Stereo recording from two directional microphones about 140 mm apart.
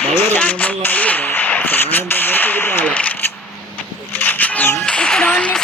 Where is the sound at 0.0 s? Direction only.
15° left (ahead or behind).